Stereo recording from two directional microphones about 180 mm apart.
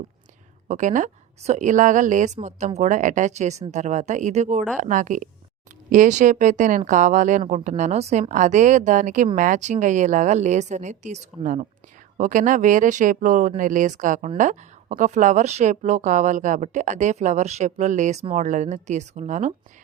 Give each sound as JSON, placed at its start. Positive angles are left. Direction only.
{"t": 0.7, "sound": "speech", "side_deg": -45}